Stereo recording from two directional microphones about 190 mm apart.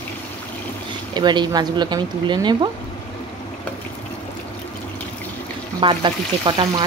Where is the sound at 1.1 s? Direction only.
25° right (ahead or behind).